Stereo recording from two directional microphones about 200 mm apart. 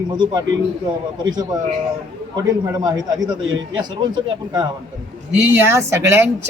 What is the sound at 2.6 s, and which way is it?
Speech, 20° right (ahead or behind).